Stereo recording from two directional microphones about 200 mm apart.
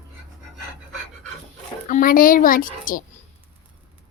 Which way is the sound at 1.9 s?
40° left (ahead or behind).